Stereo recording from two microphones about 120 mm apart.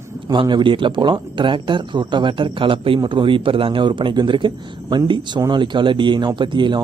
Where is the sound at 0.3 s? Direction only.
40° right (ahead or behind).